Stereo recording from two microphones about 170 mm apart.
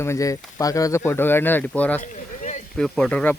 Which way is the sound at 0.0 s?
15° left (ahead or behind).